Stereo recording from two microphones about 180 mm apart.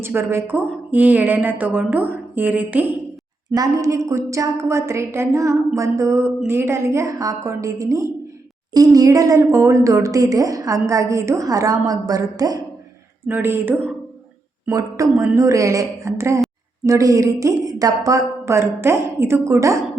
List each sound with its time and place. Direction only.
0.0 s a woman's voice: 15° right (ahead or behind)
15.1 s a woman's voice: 5° right (ahead or behind)
15.4 s a woman's voice: 15° right (ahead or behind)